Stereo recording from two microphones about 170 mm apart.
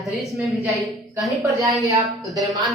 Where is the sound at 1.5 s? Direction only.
20° right (ahead or behind).